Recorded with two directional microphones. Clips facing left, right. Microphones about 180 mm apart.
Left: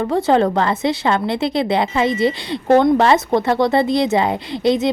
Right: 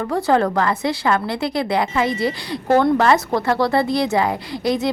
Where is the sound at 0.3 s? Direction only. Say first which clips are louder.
Left 1 dB; 20° left (ahead or behind).